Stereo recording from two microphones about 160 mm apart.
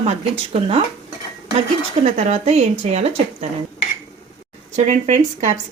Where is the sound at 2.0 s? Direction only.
45° right (ahead or behind).